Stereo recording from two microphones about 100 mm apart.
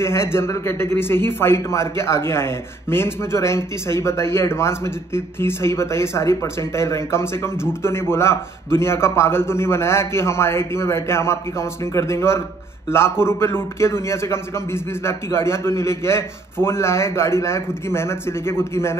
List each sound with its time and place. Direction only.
0.0 s a man's voice: 25° left (ahead or behind)